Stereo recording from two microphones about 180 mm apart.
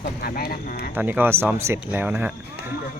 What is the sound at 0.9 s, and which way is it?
Speech, 10° right (ahead or behind).